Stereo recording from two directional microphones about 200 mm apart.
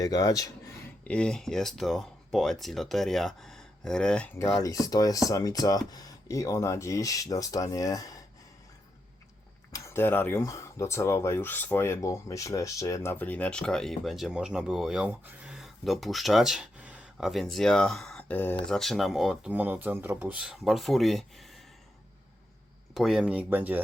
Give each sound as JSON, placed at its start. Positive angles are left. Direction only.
{"t": 0.0, "sound": "speech", "side_deg": 20}
{"t": 1.0, "sound": "speech", "side_deg": 5}
{"t": 4.4, "sound": "speech", "side_deg": 15}
{"t": 9.7, "sound": "speech", "side_deg": 15}
{"t": 23.0, "sound": "speech", "side_deg": 0}